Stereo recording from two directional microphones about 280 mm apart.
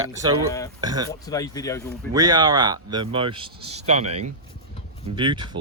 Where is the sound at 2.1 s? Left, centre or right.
Centre.